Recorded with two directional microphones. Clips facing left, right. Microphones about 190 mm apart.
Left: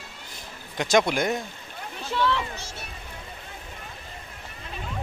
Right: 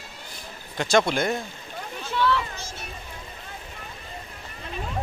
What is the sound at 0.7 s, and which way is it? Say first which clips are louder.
Speech: even; 15° left (ahead or behind).